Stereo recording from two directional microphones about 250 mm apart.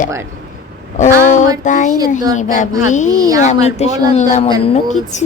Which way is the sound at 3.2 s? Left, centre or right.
Centre.